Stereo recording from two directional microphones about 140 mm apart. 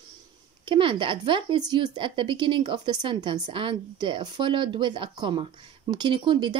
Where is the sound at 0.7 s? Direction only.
35° right (ahead or behind).